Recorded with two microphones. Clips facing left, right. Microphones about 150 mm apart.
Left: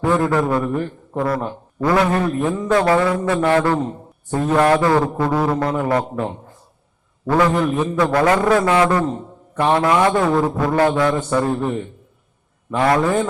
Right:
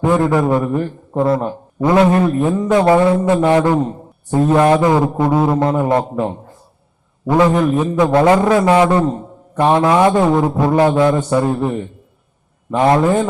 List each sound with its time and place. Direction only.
0.0 s a man's voice: 20° right (ahead or behind)
12.7 s a man's voice: 25° right (ahead or behind)